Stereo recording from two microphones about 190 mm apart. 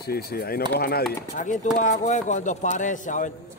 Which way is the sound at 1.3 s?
40° left (ahead or behind).